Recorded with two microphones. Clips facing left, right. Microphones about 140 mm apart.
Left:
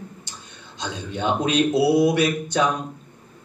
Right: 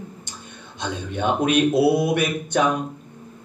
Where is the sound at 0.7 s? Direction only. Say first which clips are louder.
Right 2 dB; 55° right (ahead or behind).